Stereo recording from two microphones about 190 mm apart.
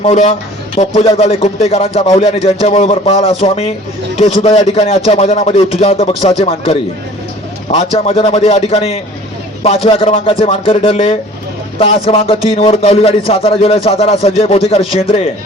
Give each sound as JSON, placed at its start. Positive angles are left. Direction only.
{"t": 0.0, "sound": "speech", "side_deg": 35}